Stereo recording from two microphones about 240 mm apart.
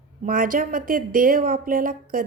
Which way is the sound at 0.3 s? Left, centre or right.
Right.